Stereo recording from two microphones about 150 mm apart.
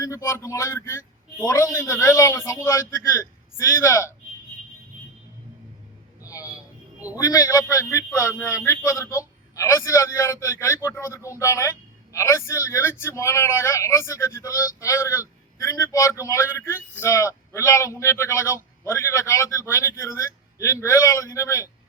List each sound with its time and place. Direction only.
0.0 s speech: 20° left (ahead or behind)
6.2 s a sound: 20° left (ahead or behind)
7.2 s speech: 20° left (ahead or behind)